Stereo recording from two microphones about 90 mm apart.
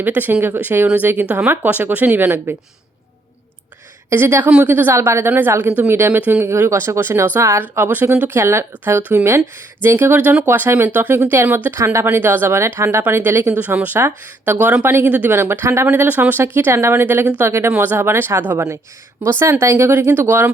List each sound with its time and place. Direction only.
0.0 s speech: 20° right (ahead or behind)
4.1 s speech: 30° right (ahead or behind)
7.6 s speech: 20° right (ahead or behind)
18.5 s speech: 40° right (ahead or behind)